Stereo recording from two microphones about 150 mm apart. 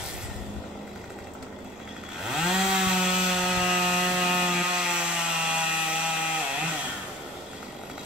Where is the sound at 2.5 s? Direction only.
5° right (ahead or behind).